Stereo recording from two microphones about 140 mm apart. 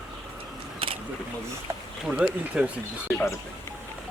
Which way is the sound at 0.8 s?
40° right (ahead or behind).